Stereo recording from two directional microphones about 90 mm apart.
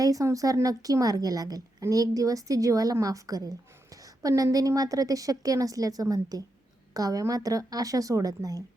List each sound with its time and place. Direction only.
0.0 s a woman's voice: 40° right (ahead or behind)
4.0 s a sound: 40° right (ahead or behind)
4.5 s a woman's voice: 40° right (ahead or behind)